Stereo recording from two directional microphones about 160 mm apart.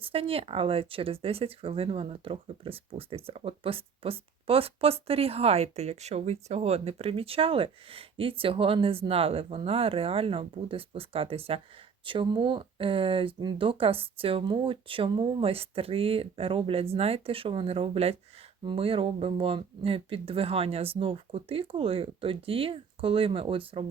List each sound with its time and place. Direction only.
0.0 s speech: 35° right (ahead or behind)